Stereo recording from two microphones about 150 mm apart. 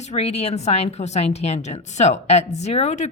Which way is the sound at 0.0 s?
45° left (ahead or behind).